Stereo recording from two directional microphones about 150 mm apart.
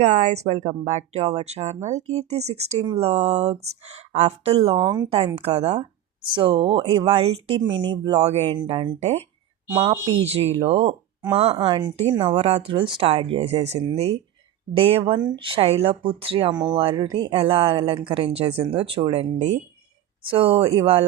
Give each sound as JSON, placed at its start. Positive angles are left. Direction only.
{"t": 0.0, "sound": "speech", "side_deg": -55}
{"t": 4.7, "sound": "speech", "side_deg": -30}
{"t": 5.1, "sound": "speech", "side_deg": -40}
{"t": 6.3, "sound": "speech", "side_deg": -35}
{"t": 7.7, "sound": "speech", "side_deg": -30}
{"t": 8.2, "sound": "speech", "side_deg": -45}
{"t": 9.0, "sound": "speech", "side_deg": -50}
{"t": 9.8, "sound": "speech", "side_deg": -35}
{"t": 12.2, "sound": "speech", "side_deg": -40}
{"t": 20.2, "sound": "speech", "side_deg": -35}